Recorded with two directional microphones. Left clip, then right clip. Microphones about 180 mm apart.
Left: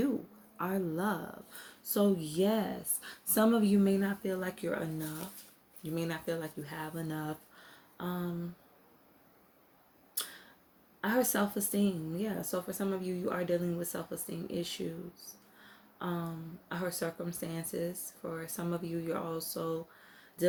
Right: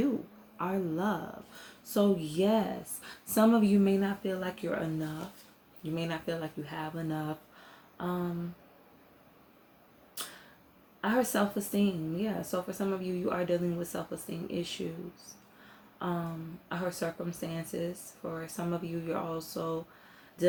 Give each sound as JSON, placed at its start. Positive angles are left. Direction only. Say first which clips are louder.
{"t": 0.5, "sound": "speech", "louder": "right 2 dB", "side_deg": 45}
{"t": 11.0, "sound": "speech", "louder": "right 2 dB", "side_deg": 45}
{"t": 16.0, "sound": "a sound", "louder": "right 3 dB", "side_deg": 45}
{"t": 16.6, "sound": "speech", "louder": "right 2 dB", "side_deg": 45}